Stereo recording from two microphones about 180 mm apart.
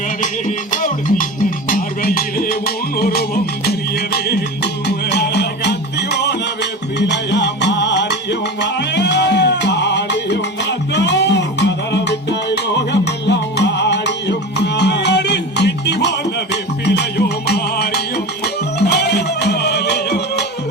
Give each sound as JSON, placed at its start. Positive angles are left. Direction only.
{"t": 0.2, "sound": "music", "side_deg": 45}